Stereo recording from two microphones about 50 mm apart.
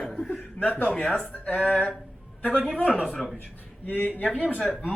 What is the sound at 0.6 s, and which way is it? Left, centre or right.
Speech, left.